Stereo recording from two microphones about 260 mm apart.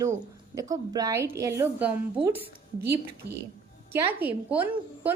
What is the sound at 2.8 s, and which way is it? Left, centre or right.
Speech, right.